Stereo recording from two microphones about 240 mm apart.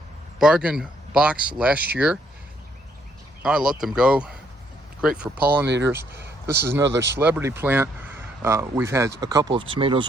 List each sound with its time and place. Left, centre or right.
0.3 s speech: centre
3.4 s speech: centre
5.6 s speech: right
7.2 s speech: centre